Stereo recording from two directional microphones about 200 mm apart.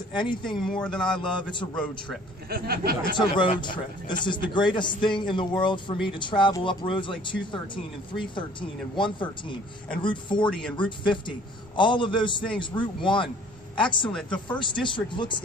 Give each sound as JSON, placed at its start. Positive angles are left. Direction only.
{"t": 0.1, "sound": "speech", "side_deg": 25}
{"t": 0.6, "sound": "speech", "side_deg": 5}
{"t": 2.5, "sound": "speech", "side_deg": -50}
{"t": 3.0, "sound": "speech", "side_deg": 25}
{"t": 10.4, "sound": "speech", "side_deg": 5}
{"t": 10.8, "sound": "speech", "side_deg": 25}
{"t": 14.0, "sound": "speech", "side_deg": 5}
{"t": 14.6, "sound": "speech", "side_deg": 25}